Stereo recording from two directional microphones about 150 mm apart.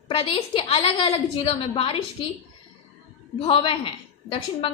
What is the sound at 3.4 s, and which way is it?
Speech, 35° left (ahead or behind).